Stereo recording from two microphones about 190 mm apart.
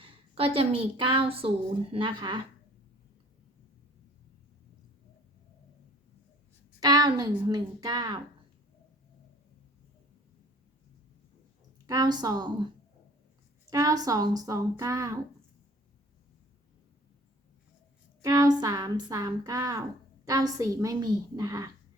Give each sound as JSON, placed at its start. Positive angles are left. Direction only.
{"t": 0.0, "sound": "a woman's voice", "side_deg": -30}
{"t": 6.7, "sound": "a woman's voice", "side_deg": -20}
{"t": 11.9, "sound": "a woman's voice", "side_deg": -20}
{"t": 13.7, "sound": "a woman's voice", "side_deg": -20}
{"t": 18.2, "sound": "a woman's voice", "side_deg": -15}